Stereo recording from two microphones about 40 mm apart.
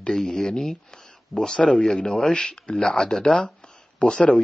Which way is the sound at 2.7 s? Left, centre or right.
Centre.